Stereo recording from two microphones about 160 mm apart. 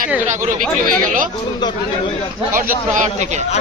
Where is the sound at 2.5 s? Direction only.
60° right (ahead or behind).